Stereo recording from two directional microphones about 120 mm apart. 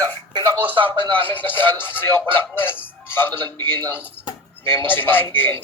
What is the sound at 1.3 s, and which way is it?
Speech, 15° left (ahead or behind).